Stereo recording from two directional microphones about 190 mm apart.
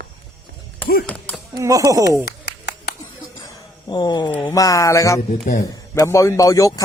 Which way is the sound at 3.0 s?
20° left (ahead or behind).